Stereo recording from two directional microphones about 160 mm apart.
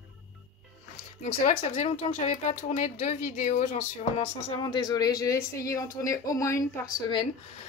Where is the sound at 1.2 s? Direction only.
50° left (ahead or behind).